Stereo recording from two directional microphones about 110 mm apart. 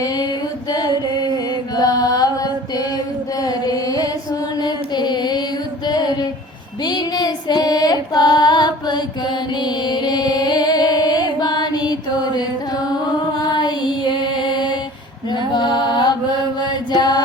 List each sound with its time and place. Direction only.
0.0 s music: 35° left (ahead or behind)
1.7 s mantra: 35° left (ahead or behind)
3.4 s music: 35° left (ahead or behind)
5.8 s female singing: 40° left (ahead or behind)
13.6 s music: 40° left (ahead or behind)
16.6 s mantra: 40° left (ahead or behind)